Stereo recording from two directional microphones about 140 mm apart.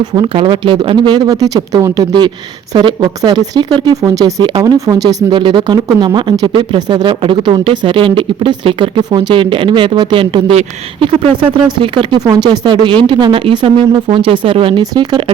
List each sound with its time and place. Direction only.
0.0 s speech: 30° right (ahead or behind)
11.8 s speech: 35° right (ahead or behind)